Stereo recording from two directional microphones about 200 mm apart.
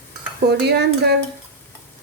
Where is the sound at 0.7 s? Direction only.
55° right (ahead or behind).